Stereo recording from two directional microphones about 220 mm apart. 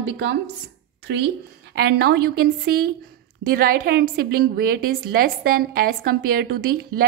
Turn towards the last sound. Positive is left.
turn(degrees=-45)  # may be behind; listen again after turning